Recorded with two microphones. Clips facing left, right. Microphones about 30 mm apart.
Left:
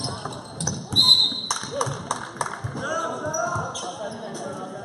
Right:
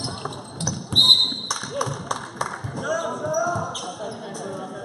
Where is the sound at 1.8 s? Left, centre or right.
Centre.